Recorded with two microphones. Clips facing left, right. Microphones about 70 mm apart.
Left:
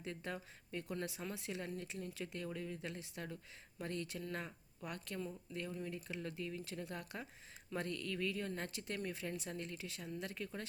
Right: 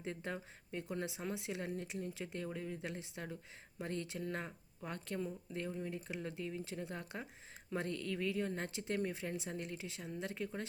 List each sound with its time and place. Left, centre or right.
0.0 s speech: right